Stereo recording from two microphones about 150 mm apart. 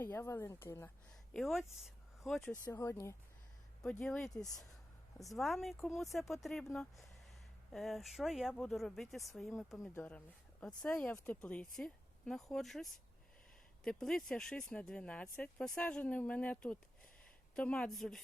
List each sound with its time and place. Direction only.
0.0 s speech: 15° left (ahead or behind)
1.3 s speech: centre (ahead or behind)
2.7 s speech: 15° left (ahead or behind)
3.8 s speech: 5° left (ahead or behind)